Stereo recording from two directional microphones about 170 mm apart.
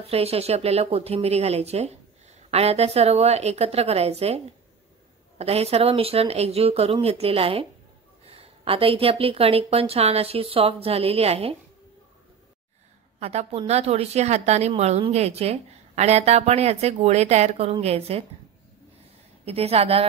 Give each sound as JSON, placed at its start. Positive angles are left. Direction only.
{"t": 0.0, "sound": "a woman's voice", "side_deg": -35}
{"t": 5.4, "sound": "a woman's voice", "side_deg": -35}
{"t": 13.2, "sound": "a woman's voice", "side_deg": -40}
{"t": 19.4, "sound": "a woman's voice", "side_deg": -35}